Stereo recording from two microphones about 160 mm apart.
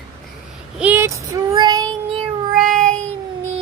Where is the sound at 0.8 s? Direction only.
10° right (ahead or behind).